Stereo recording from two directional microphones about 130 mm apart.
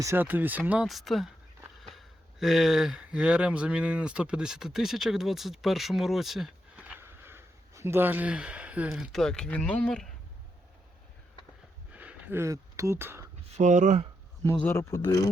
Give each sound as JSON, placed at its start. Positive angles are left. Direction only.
{"t": 0.0, "sound": "speech", "side_deg": -20}
{"t": 0.9, "sound": "speech", "side_deg": 0}
{"t": 11.9, "sound": "a sound", "side_deg": -10}
{"t": 13.6, "sound": "speech", "side_deg": -70}
{"t": 14.4, "sound": "speech", "side_deg": 20}